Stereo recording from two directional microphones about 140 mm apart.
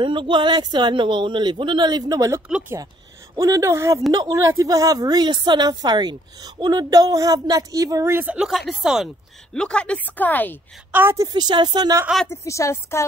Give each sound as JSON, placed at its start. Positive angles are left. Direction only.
{"t": 0.0, "sound": "a woman's voice", "side_deg": -35}
{"t": 10.9, "sound": "a woman's voice", "side_deg": -15}
{"t": 11.3, "sound": "speech", "side_deg": -30}
{"t": 12.3, "sound": "a woman's voice", "side_deg": 20}